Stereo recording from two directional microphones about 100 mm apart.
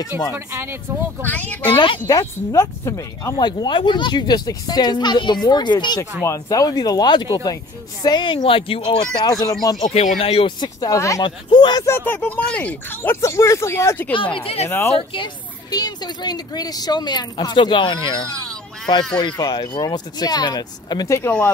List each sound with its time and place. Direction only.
0.1 s speech: 25° right (ahead or behind)
1.2 s speech: 15° left (ahead or behind)
1.7 s speech: 55° left (ahead or behind)
2.0 s speech: 35° left (ahead or behind)
3.4 s speech: 45° left (ahead or behind)
6.2 s speech: 35° left (ahead or behind); by 9.0 s 60° left (ahead or behind)
9.3 s speech: 40° left (ahead or behind)
9.8 s speech: 80° left
10.6 s speech: 40° left (ahead or behind)
11.2 s speech: 50° left (ahead or behind)
11.8 s speech: 25° left (ahead or behind)
14.1 s speech: 60° left (ahead or behind)
14.9 s speech: 60° left (ahead or behind)
19.1 s speech: 45° left (ahead or behind)